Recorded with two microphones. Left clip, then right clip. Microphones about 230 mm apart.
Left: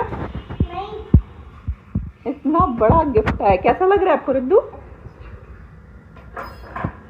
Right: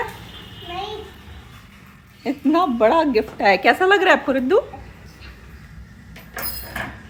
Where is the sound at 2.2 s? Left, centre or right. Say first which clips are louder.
Left 1 dB; right.